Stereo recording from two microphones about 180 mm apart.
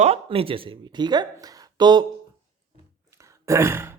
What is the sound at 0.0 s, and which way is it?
A woman's voice, 35° right (ahead or behind).